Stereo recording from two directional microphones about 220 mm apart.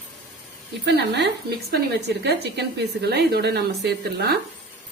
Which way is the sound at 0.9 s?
50° right (ahead or behind).